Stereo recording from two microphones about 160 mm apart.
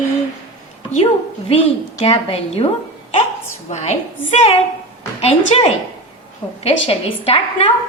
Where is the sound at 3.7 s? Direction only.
45° left (ahead or behind).